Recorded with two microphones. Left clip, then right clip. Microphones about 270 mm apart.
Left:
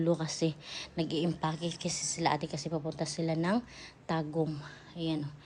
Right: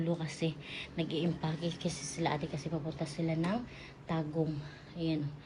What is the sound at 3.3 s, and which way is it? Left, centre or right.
Speech, left.